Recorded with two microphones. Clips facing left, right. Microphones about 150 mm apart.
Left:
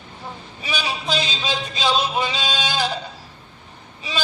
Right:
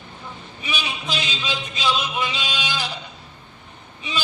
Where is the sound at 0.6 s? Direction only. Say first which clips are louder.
Left 3 dB; 35° left (ahead or behind).